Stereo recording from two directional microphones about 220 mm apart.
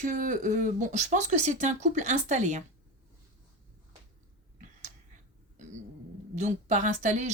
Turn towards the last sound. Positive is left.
turn(degrees=-35)  # may be behind; listen again after turning